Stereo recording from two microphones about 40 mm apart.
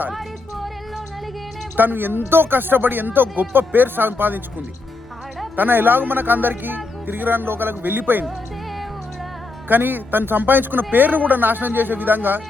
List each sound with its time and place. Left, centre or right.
1.7 s speech: right
5.5 s speech: right
9.6 s a man's voice: right